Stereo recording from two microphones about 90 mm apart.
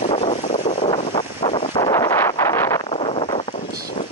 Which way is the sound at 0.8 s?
80° left.